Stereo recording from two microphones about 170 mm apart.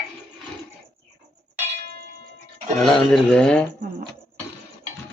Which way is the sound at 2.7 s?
Centre (ahead or behind).